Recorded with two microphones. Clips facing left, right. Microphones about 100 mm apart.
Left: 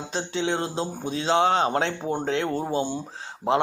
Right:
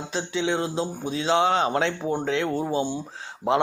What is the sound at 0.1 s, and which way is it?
Speech, 45° left (ahead or behind).